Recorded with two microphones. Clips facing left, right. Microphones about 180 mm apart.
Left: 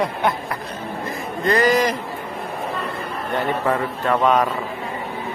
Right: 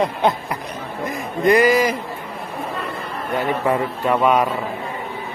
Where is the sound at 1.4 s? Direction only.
10° right (ahead or behind).